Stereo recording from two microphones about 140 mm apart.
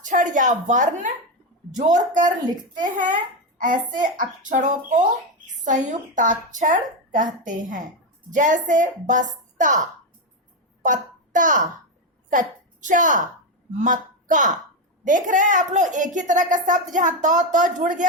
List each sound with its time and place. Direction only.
0.0 s a woman's voice: 65° right (ahead or behind)
3.6 s a woman's voice: 70° right (ahead or behind)
10.8 s a child's voice: 65° right (ahead or behind)